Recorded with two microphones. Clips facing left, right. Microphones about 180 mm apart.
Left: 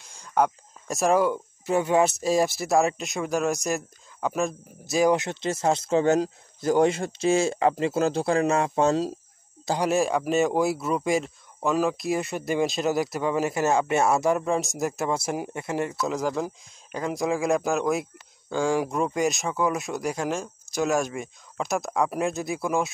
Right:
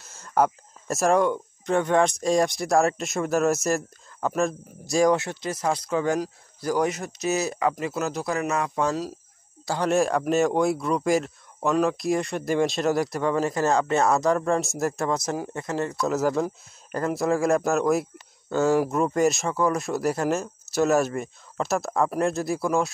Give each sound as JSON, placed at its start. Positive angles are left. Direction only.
{"t": 0.3, "sound": "speech", "side_deg": -5}
{"t": 5.1, "sound": "speech", "side_deg": 20}
{"t": 9.8, "sound": "speech", "side_deg": 0}
{"t": 16.1, "sound": "speech", "side_deg": -5}